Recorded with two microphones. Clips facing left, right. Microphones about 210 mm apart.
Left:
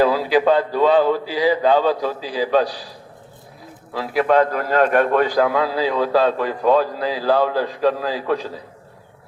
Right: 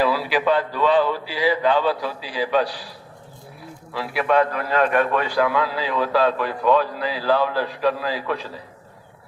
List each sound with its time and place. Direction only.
0.0 s a man's voice: 45° left (ahead or behind)
3.9 s a man's voice: 40° left (ahead or behind)